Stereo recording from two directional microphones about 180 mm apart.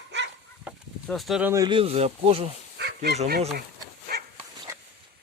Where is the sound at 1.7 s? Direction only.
35° right (ahead or behind).